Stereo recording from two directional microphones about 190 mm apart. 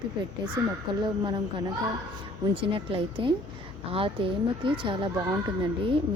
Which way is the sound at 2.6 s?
25° right (ahead or behind).